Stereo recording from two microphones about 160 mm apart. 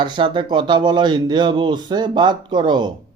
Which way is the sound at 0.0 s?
30° right (ahead or behind).